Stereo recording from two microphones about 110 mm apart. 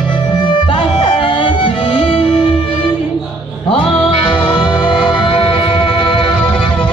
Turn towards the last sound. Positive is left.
turn(degrees=50)  # may be behind; listen again after turning